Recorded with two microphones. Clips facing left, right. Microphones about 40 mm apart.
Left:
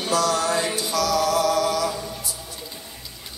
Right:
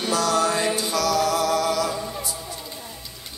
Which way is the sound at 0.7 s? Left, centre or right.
Right.